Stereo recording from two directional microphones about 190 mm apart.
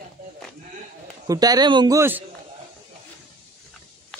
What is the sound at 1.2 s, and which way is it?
A man's voice, 20° right (ahead or behind).